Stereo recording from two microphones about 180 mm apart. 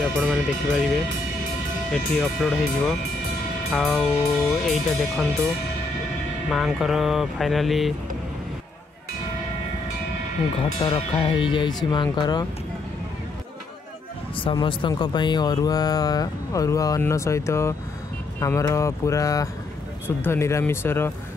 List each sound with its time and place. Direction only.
0.0 s music: centre (ahead or behind)
1.9 s music: 5° left (ahead or behind)
6.5 s music: centre (ahead or behind)
10.8 s speech: 25° left (ahead or behind)
14.3 s speech: 25° left (ahead or behind)